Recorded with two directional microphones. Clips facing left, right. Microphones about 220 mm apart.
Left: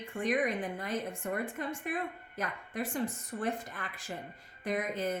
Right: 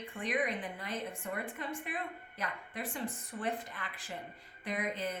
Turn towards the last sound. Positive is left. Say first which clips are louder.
# left 4 dB
turn(degrees=45)  # may be behind; listen again after turning